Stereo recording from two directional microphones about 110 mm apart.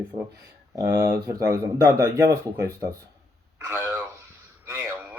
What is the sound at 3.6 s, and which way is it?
Radio, 20° right (ahead or behind).